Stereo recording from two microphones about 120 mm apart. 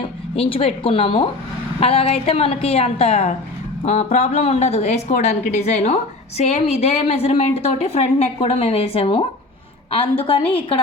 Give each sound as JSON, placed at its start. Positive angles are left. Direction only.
{"t": 0.3, "sound": "a woman's voice", "side_deg": 50}
{"t": 3.8, "sound": "a woman's voice", "side_deg": 70}